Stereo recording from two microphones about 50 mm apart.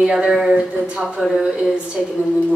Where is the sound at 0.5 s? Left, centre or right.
Centre.